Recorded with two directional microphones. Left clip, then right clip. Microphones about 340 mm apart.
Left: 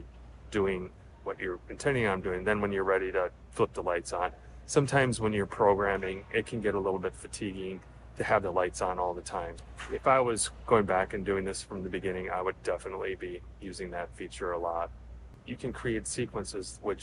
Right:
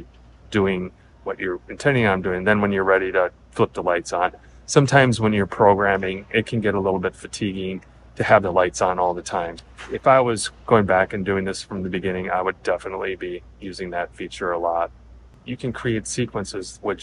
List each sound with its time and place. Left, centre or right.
0.5 s speech: right